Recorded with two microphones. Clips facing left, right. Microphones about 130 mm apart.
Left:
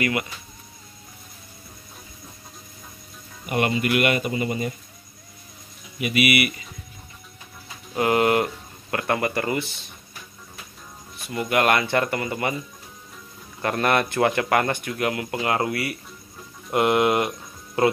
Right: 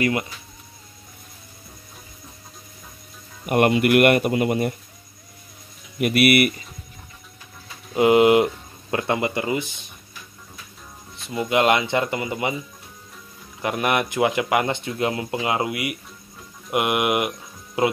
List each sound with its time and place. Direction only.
0.0 s speech: 30° right (ahead or behind)
3.4 s speech: 55° right (ahead or behind)
5.9 s speech: 60° right (ahead or behind)
7.9 s speech: 15° right (ahead or behind)
11.1 s speech: 20° right (ahead or behind)
13.6 s speech: 15° right (ahead or behind)